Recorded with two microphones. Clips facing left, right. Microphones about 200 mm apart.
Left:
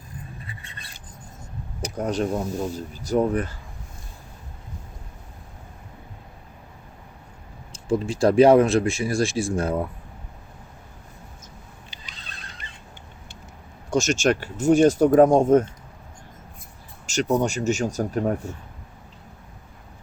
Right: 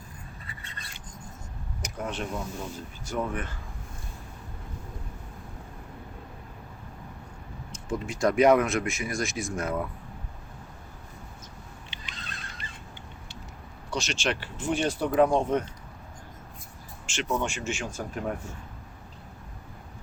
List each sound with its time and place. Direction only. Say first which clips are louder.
1.8 s speech: left 9 dB; 40° left (ahead or behind)
7.7 s speech: left 9 dB; 30° left (ahead or behind)
13.9 s speech: left 9 dB; 45° left (ahead or behind)
17.1 s speech: left 8 dB; 40° left (ahead or behind)